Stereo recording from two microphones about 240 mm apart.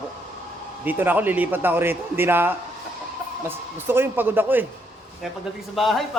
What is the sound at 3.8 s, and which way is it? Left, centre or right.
Speech, centre.